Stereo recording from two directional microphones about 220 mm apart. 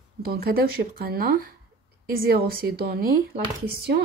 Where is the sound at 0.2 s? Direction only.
45° right (ahead or behind).